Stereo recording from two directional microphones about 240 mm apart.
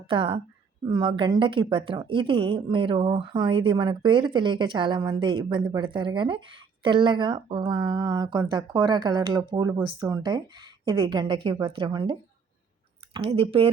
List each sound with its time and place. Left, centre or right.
0.1 s a woman's voice: right
13.1 s a woman's voice: right